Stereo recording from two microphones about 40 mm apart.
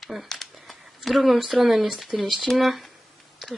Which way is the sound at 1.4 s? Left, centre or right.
Centre.